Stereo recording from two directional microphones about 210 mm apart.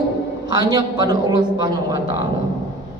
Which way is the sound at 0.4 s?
20° right (ahead or behind).